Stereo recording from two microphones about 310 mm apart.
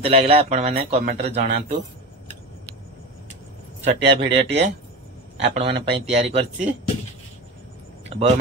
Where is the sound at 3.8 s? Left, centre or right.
Centre.